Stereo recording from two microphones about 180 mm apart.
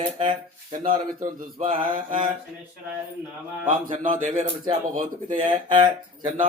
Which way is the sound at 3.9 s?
45° right (ahead or behind).